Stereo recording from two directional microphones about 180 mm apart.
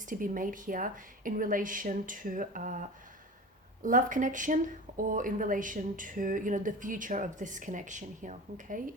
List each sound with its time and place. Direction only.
0.1 s speech: 50° right (ahead or behind)
3.8 s speech: 45° right (ahead or behind)